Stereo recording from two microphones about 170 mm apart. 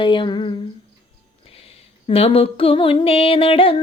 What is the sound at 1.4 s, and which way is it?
Female singing, 35° left (ahead or behind).